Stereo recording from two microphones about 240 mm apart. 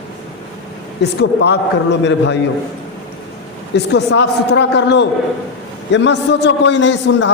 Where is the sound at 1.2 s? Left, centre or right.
Left.